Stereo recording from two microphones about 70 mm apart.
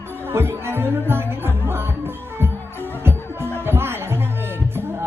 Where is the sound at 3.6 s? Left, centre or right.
Right.